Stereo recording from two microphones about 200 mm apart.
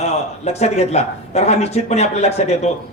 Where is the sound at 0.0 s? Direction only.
30° left (ahead or behind).